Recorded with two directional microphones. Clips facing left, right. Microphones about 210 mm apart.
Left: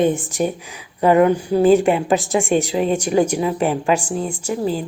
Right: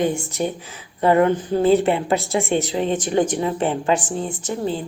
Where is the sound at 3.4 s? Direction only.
25° right (ahead or behind).